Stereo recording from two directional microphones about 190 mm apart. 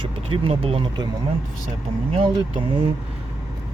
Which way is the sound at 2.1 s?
25° right (ahead or behind).